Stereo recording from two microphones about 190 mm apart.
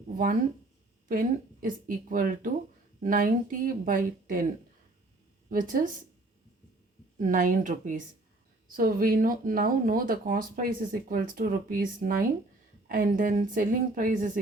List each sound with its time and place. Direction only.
1.0 s speech: 45° right (ahead or behind)
5.5 s speech: 45° right (ahead or behind)
7.2 s speech: 45° right (ahead or behind)